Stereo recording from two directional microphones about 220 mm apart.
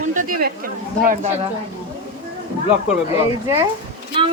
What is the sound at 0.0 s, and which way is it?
Speech, 35° right (ahead or behind).